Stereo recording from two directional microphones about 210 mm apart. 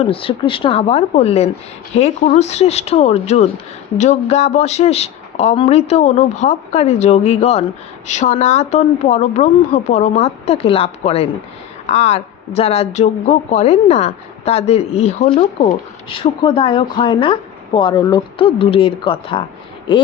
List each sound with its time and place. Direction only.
0.0 s a woman's voice: 25° left (ahead or behind)